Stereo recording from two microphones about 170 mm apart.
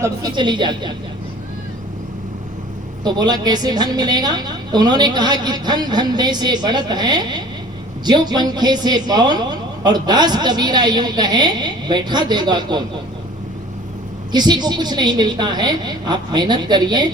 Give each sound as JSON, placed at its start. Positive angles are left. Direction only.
{"t": 0.0, "sound": "a man's voice", "side_deg": -25}
{"t": 3.0, "sound": "a man's voice", "side_deg": -25}
{"t": 14.3, "sound": "a man's voice", "side_deg": -25}